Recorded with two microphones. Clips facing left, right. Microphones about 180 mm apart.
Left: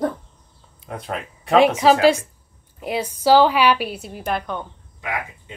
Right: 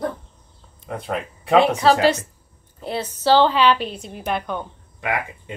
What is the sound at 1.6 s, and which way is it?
A woman's voice, 10° left (ahead or behind).